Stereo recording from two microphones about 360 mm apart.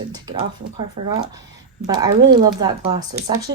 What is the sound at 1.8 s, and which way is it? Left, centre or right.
Speech, centre.